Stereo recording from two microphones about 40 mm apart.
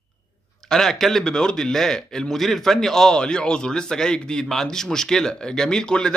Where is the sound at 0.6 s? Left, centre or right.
Centre.